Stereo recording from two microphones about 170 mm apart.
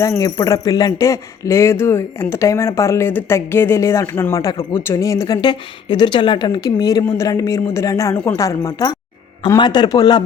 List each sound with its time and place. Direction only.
0.0 s a man's voice: 20° left (ahead or behind)